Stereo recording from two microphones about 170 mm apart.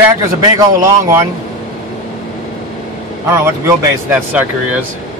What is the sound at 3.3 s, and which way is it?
Speech, 15° right (ahead or behind).